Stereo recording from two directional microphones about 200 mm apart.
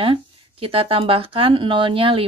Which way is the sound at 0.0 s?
25° right (ahead or behind).